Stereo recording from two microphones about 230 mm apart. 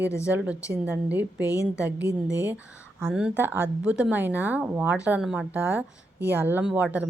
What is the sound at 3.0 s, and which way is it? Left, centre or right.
Speech, centre.